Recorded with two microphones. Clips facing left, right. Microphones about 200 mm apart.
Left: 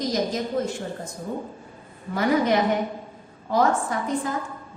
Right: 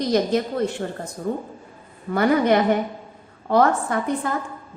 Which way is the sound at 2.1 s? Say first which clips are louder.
Right 3 dB; 60° right (ahead or behind).